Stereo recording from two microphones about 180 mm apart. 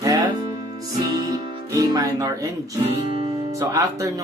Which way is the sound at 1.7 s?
20° right (ahead or behind).